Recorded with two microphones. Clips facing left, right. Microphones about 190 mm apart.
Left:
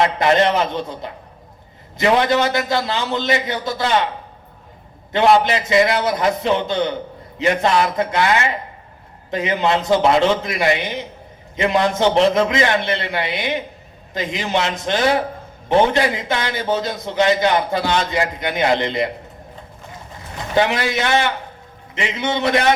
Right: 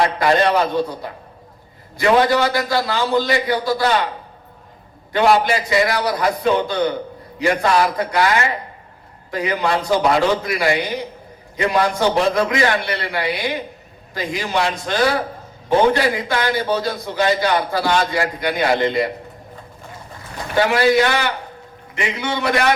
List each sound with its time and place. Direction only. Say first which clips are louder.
0.0 s a man's voice: left 1 dB; 20° left (ahead or behind)
5.1 s a man's voice: left 1 dB; 20° left (ahead or behind)
20.6 s a man's voice: right 4 dB; 20° left (ahead or behind)